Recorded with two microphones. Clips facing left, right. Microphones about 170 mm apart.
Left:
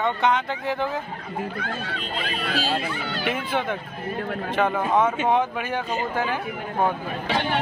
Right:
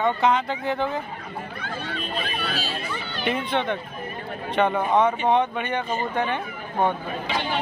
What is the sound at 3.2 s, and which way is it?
Speech, 5° left (ahead or behind).